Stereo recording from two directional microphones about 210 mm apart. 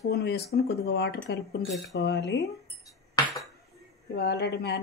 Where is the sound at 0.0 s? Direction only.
50° left (ahead or behind).